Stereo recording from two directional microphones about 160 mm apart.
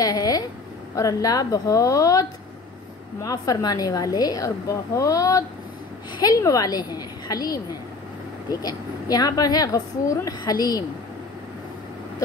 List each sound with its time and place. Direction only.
0.0 s a woman's voice: 25° left (ahead or behind)